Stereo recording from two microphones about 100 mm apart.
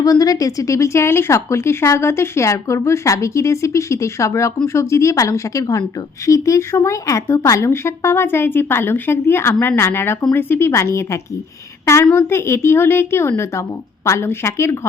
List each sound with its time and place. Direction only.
0.0 s speech: 35° left (ahead or behind)